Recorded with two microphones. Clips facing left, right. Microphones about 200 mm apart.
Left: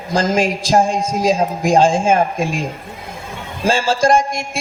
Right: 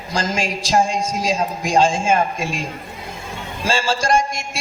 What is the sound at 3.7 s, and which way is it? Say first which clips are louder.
Speech: left 5 dB; 50° left (ahead or behind).